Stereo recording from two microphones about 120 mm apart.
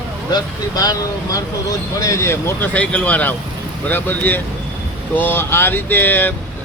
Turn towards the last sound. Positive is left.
turn(degrees=15)  # may be behind; listen again after turning